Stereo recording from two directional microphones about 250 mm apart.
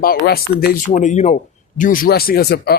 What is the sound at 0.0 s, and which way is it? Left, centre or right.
Speech, left.